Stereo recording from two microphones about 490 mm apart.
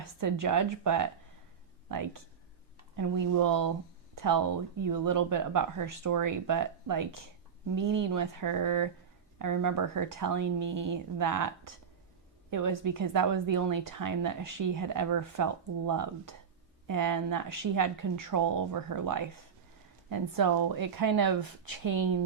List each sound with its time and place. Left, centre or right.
0.2 s speech: right
8.1 s speech: right